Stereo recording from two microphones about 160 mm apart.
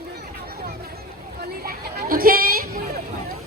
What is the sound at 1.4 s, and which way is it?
Hubbub, 70° right (ahead or behind).